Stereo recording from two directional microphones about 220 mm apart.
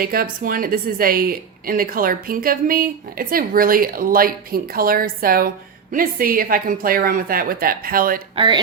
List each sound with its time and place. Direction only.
0.0 s a woman's voice: 40° right (ahead or behind)
8.4 s speech: 20° right (ahead or behind)